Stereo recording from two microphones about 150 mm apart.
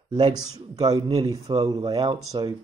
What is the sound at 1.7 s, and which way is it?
Speech, 35° right (ahead or behind).